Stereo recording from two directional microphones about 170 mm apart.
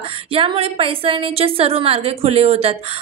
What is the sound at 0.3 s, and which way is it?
A woman's voice, 35° right (ahead or behind).